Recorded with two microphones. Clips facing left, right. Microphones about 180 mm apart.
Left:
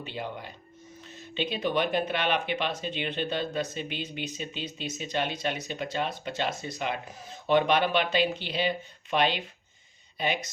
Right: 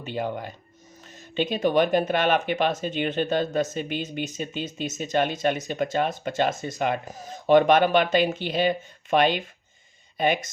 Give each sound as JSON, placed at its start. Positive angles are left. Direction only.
{"t": 0.0, "sound": "speech", "side_deg": -45}